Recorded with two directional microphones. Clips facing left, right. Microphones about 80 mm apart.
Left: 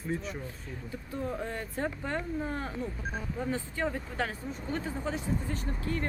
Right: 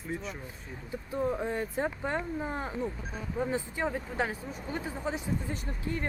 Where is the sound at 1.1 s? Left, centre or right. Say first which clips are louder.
Right 4 dB; centre.